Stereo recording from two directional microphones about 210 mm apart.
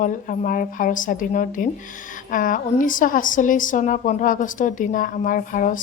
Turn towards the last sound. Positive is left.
turn(degrees=40)  # may be behind; listen again after turning